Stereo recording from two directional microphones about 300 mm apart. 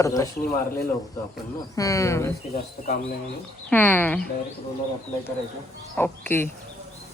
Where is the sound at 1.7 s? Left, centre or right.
Centre.